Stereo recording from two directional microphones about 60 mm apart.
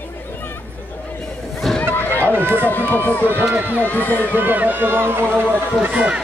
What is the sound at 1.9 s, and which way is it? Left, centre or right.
Run, left.